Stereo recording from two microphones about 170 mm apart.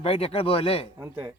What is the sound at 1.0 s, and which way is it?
Speech, 15° right (ahead or behind).